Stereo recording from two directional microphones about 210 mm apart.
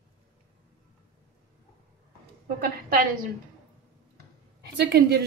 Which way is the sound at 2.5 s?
45° right (ahead or behind).